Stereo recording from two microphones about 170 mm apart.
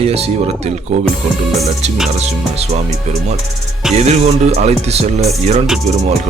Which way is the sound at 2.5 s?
40° right (ahead or behind).